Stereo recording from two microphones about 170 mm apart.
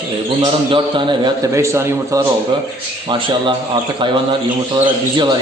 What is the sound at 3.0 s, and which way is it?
A man's voice, 30° right (ahead or behind).